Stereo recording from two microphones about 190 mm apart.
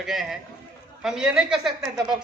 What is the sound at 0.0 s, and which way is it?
A man's voice, centre (ahead or behind).